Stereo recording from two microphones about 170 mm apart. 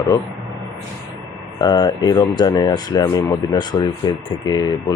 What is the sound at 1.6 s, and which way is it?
Speech, 25° left (ahead or behind).